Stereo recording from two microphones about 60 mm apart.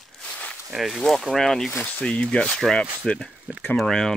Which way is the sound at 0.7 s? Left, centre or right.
Centre.